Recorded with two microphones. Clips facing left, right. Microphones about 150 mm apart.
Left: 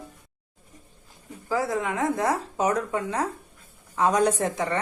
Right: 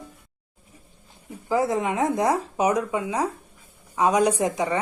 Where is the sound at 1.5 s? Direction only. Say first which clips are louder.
Right 3 dB; 20° right (ahead or behind).